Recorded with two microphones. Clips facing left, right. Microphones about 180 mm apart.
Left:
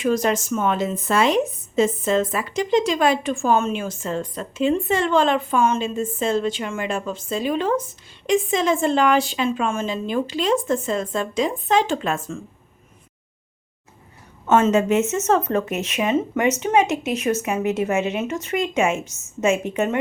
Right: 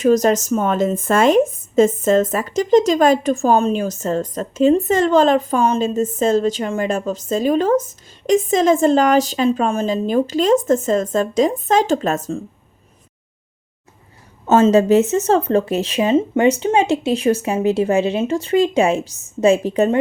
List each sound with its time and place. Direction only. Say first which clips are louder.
0.0 s speech: right 6 dB; 40° right (ahead or behind)
14.4 s speech: right 5 dB; 30° right (ahead or behind)